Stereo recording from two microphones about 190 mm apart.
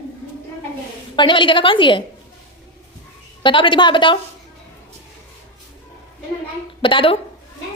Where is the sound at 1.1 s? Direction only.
25° left (ahead or behind).